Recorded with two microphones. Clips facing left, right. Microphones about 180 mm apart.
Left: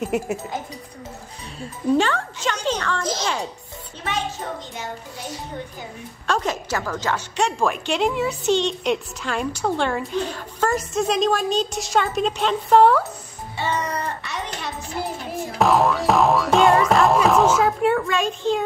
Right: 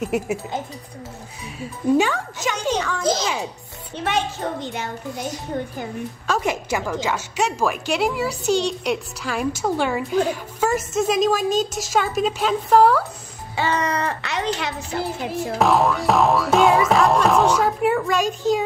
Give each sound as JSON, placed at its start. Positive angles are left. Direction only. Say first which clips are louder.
{"t": 0.0, "sound": "music", "louder": "right 1 dB", "side_deg": 0}
{"t": 1.6, "sound": "speech", "louder": "right 1 dB", "side_deg": -10}
{"t": 6.2, "sound": "speech", "louder": "even", "side_deg": -10}
{"t": 7.3, "sound": "music", "louder": "even", "side_deg": -5}
{"t": 9.6, "sound": "speech", "louder": "left 1 dB", "side_deg": -5}
{"t": 10.3, "sound": "music", "louder": "right 1 dB", "side_deg": -5}
{"t": 13.6, "sound": "a child's voice", "louder": "right 3 dB", "side_deg": -90}
{"t": 14.9, "sound": "a woman's voice", "louder": "right 2 dB", "side_deg": -80}
{"t": 15.6, "sound": "music", "louder": "left 1 dB", "side_deg": 0}